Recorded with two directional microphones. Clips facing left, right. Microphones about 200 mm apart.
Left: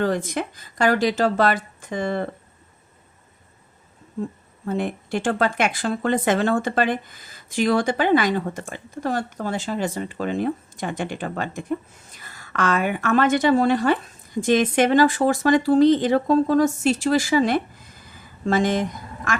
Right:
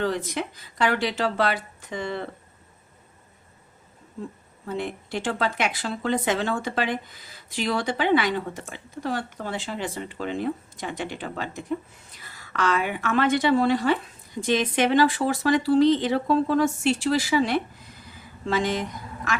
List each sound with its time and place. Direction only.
0.0 s speech: 50° left (ahead or behind)
4.6 s a woman's voice: 50° left (ahead or behind)